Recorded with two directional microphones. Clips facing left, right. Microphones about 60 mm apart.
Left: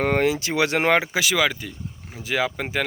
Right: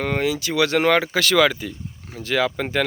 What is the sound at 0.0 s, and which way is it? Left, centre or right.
Speech, left.